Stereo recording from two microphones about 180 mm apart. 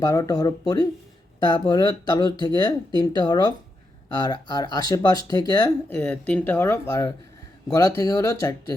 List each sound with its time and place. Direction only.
0.0 s speech: 20° left (ahead or behind)
5.9 s speech: 10° left (ahead or behind)